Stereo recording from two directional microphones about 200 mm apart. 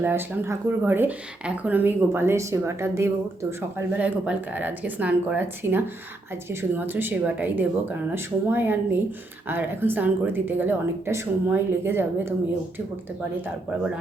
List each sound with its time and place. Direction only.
0.0 s speech: 10° right (ahead or behind)